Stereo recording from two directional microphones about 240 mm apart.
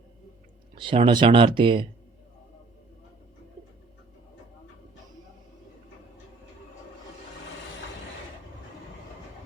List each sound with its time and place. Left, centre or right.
0.8 s speech: right